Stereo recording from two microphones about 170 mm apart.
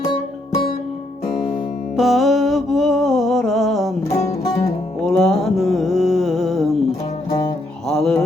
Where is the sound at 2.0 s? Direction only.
Centre (ahead or behind).